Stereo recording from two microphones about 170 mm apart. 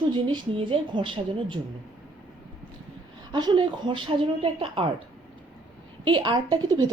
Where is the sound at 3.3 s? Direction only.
30° right (ahead or behind).